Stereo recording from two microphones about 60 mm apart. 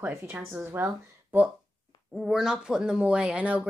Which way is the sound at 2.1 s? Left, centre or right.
Centre.